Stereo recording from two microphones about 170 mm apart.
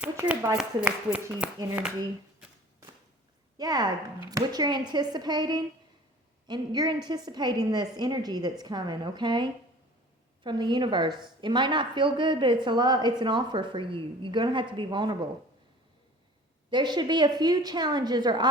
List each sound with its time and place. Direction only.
0.0 s speech: 10° right (ahead or behind)
3.6 s a woman's voice: 25° right (ahead or behind)
16.6 s a woman's voice: 25° right (ahead or behind)